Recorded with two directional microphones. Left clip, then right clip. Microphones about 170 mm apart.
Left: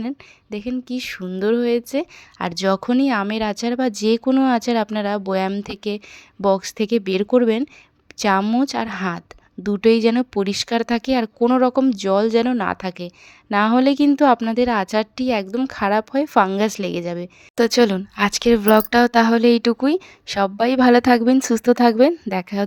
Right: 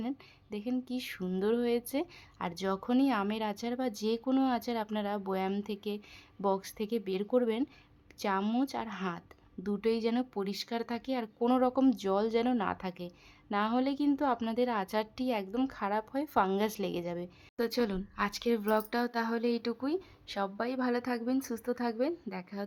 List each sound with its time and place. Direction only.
0.5 s a woman's voice: 30° left (ahead or behind)
8.4 s speech: 25° left (ahead or behind)
8.7 s a woman's voice: 40° left (ahead or behind)
11.4 s a woman's voice: 30° left (ahead or behind)
17.6 s speech: 45° left (ahead or behind)